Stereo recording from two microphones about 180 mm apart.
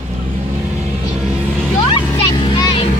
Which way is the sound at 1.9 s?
25° left (ahead or behind).